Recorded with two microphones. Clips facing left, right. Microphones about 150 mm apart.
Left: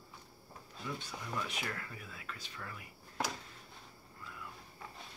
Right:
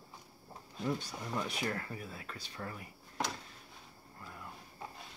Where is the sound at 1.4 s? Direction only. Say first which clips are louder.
Right 6 dB; 35° right (ahead or behind).